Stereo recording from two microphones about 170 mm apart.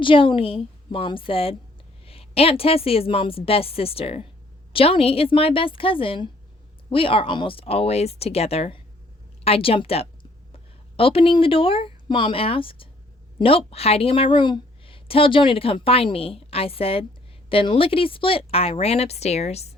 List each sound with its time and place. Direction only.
0.0 s a woman's voice: 30° left (ahead or behind)